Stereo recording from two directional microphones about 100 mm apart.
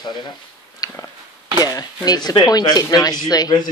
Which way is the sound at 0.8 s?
35° left (ahead or behind).